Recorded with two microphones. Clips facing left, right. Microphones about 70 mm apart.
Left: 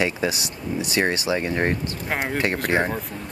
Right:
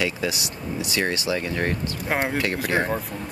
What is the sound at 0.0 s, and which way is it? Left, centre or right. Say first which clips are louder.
Speech: left 2 dB; left.